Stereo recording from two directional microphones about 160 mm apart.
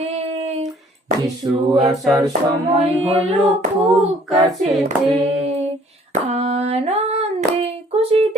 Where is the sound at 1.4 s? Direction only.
25° right (ahead or behind).